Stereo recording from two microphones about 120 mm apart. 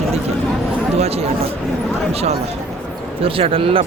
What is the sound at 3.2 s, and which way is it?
Speech, 50° right (ahead or behind).